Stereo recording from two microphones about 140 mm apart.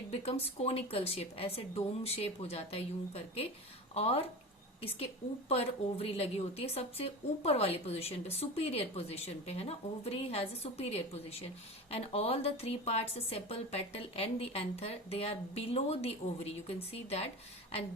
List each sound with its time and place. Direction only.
0.1 s a woman's voice: 45° left (ahead or behind)
5.5 s a woman's voice: 45° left (ahead or behind)